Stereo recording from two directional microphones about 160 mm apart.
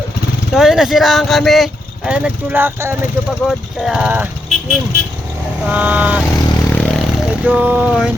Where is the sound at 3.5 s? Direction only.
Centre (ahead or behind).